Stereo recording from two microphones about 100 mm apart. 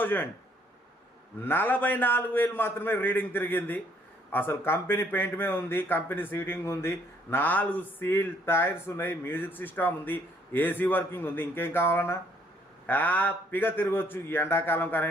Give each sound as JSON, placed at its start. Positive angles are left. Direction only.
{"t": 0.0, "sound": "a man's voice", "side_deg": 20}
{"t": 1.5, "sound": "a man's voice", "side_deg": 20}